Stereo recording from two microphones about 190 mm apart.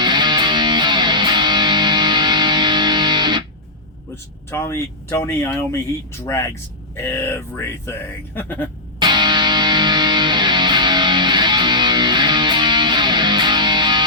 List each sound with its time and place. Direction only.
0.0 s music: 25° right (ahead or behind)
4.1 s speech: 15° left (ahead or behind)
9.0 s music: 25° right (ahead or behind)